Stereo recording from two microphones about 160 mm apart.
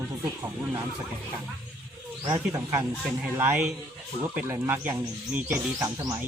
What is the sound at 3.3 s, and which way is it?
Speech, 15° right (ahead or behind).